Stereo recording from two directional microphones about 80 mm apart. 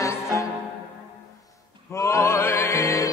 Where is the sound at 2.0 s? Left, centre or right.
Left.